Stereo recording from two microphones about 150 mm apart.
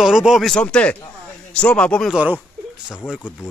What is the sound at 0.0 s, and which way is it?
Speech, 5° right (ahead or behind).